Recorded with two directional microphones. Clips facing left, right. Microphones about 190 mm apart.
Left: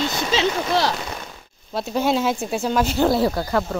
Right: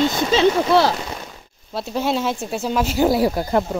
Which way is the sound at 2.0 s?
Centre (ahead or behind).